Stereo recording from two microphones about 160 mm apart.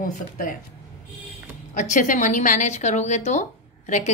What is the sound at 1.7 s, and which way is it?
A woman's voice, 50° left (ahead or behind).